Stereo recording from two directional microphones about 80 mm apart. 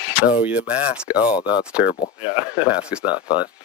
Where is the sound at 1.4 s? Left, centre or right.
Centre.